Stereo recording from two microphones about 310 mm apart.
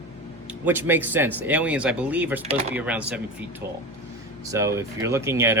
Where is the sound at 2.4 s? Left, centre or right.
Centre.